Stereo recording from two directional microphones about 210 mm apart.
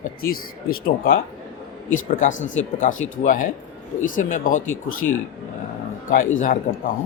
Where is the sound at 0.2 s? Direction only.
45° left (ahead or behind).